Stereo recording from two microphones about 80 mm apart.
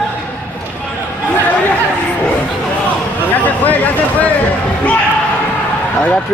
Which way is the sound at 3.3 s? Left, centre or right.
Centre.